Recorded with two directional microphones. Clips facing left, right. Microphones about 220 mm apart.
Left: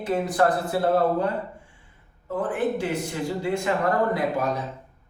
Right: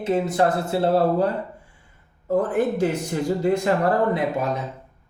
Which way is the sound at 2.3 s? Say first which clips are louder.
Right 4 dB; 40° right (ahead or behind).